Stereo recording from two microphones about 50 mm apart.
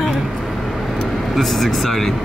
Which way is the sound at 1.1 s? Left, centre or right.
Centre.